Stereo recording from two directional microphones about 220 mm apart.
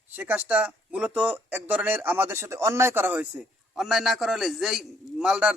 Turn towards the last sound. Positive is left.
turn(degrees=-5)  # may be behind; listen again after turning